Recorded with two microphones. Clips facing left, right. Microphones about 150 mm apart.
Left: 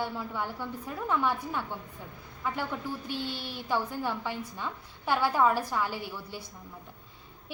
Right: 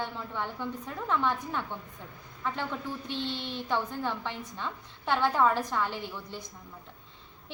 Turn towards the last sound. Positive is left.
turn(degrees=10)  # may be behind; listen again after turning